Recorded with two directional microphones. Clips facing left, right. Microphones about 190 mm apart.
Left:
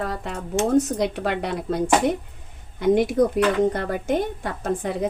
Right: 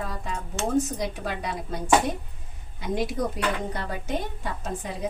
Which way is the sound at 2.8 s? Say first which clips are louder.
Left 9 dB; 55° left (ahead or behind).